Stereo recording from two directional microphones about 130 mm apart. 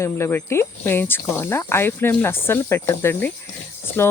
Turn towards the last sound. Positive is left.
turn(degrees=20)  # may be behind; listen again after turning